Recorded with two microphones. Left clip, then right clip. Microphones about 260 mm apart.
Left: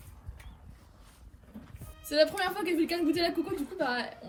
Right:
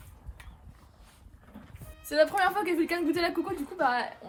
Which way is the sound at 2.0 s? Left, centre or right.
Centre.